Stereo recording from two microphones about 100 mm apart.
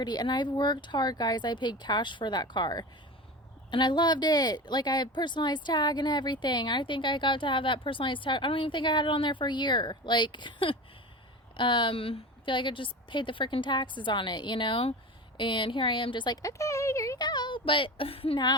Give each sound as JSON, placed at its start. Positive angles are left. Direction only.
{"t": 0.0, "sound": "a woman's voice", "side_deg": 45}
{"t": 16.5, "sound": "speech", "side_deg": 30}
{"t": 17.2, "sound": "a woman's voice", "side_deg": 45}